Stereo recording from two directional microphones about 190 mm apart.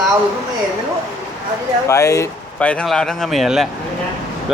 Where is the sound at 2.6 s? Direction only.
5° left (ahead or behind).